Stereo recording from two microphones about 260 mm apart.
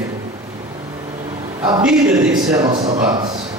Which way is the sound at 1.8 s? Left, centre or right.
Centre.